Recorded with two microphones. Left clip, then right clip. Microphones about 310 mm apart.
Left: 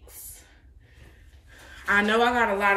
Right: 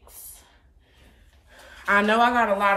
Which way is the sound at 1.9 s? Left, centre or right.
Centre.